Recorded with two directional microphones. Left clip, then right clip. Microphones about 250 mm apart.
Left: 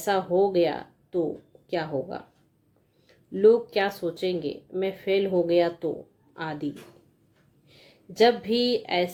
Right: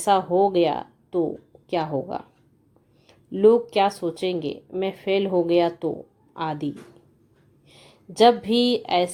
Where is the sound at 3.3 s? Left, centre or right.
Right.